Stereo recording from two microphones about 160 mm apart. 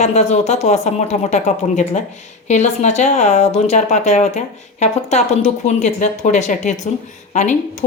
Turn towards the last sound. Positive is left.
turn(degrees=45)  # may be behind; listen again after turning